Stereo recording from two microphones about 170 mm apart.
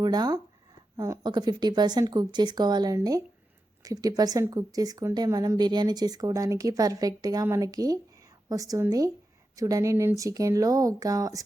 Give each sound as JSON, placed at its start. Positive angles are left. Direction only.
{"t": 0.0, "sound": "a woman's voice", "side_deg": -25}